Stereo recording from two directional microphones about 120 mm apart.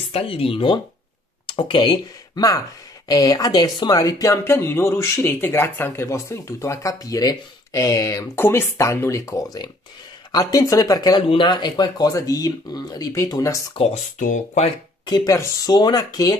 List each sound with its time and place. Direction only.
0.1 s speech: 50° left (ahead or behind); by 13.7 s 30° left (ahead or behind)
13.7 s speech: 80° left
15.0 s speech: 30° left (ahead or behind)